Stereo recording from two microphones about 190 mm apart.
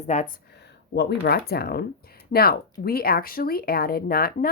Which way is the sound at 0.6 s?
60° left (ahead or behind).